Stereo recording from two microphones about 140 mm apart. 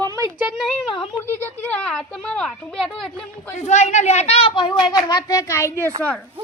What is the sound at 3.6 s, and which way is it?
A child's voice, 55° left (ahead or behind).